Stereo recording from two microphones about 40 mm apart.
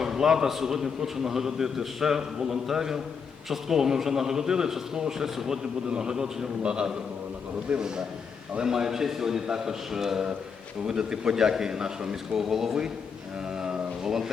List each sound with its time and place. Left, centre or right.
0.0 s a man's voice: centre
13.6 s music: centre